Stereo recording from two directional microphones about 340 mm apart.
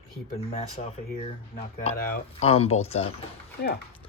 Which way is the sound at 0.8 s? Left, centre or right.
Left.